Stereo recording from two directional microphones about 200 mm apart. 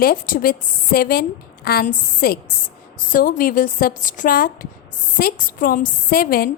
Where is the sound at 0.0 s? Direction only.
45° left (ahead or behind).